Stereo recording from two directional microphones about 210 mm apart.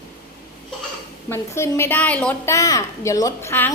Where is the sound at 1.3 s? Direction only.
15° left (ahead or behind).